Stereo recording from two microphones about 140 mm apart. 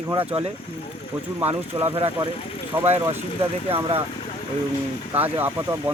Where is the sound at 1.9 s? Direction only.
40° right (ahead or behind).